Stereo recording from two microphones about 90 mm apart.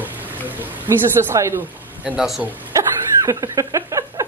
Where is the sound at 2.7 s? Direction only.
40° right (ahead or behind).